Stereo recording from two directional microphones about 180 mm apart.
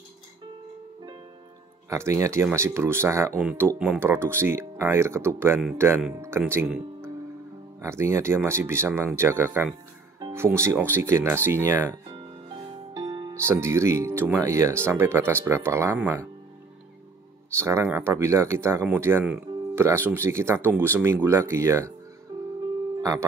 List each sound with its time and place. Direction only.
1.9 s speech: 15° right (ahead or behind)
12.9 s music: 25° right (ahead or behind)
13.4 s speech: 15° right (ahead or behind)
17.6 s speech: 15° right (ahead or behind)
22.3 s music: 30° right (ahead or behind)